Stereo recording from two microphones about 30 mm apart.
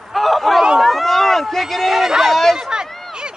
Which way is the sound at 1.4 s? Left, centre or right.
Centre.